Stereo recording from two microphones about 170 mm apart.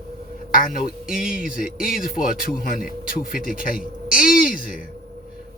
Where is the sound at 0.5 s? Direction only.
55° left (ahead or behind).